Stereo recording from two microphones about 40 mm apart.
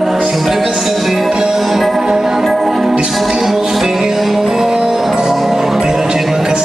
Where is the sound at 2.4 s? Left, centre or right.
Centre.